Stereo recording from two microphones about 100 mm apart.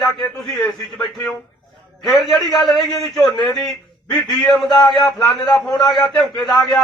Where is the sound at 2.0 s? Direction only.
Centre (ahead or behind).